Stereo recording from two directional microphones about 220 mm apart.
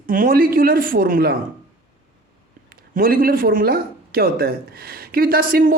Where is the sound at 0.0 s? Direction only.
40° right (ahead or behind).